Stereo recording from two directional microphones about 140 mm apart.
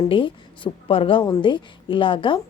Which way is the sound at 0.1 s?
35° left (ahead or behind).